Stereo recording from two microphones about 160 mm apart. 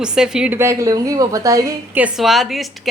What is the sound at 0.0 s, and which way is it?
A woman's voice, 5° right (ahead or behind).